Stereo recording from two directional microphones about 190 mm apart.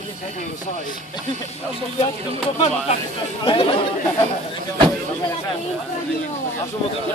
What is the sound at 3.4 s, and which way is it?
Chatter, 30° left (ahead or behind).